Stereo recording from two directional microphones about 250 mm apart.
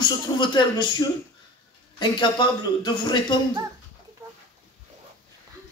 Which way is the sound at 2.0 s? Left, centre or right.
Centre.